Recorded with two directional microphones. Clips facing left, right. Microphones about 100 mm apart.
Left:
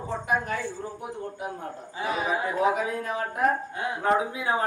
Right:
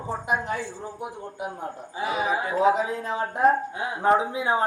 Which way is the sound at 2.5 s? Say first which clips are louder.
Right 4 dB; 20° right (ahead or behind).